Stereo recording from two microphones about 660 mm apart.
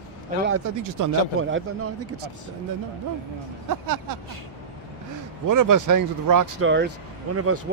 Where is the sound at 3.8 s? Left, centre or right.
Right.